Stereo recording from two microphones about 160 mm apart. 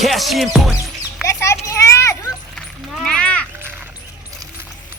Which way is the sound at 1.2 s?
20° left (ahead or behind).